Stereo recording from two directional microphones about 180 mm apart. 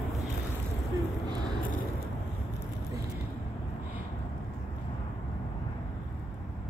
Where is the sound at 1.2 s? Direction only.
25° right (ahead or behind).